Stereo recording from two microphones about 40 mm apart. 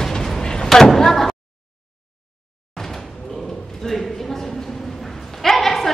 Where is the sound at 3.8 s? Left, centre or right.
Centre.